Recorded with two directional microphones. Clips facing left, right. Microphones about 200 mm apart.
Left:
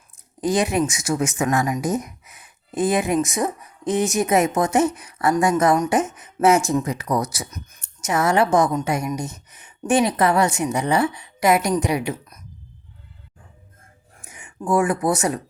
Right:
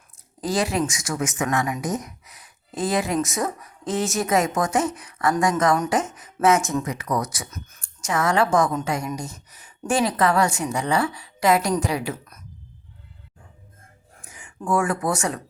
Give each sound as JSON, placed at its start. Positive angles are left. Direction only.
{"t": 0.4, "sound": "speech", "side_deg": 20}
{"t": 7.5, "sound": "a woman's voice", "side_deg": 20}
{"t": 14.3, "sound": "speech", "side_deg": 20}